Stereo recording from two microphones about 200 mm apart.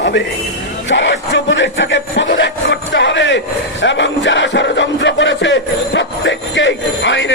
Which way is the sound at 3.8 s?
65° left (ahead or behind).